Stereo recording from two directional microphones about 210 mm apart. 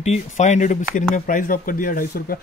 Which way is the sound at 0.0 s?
35° left (ahead or behind).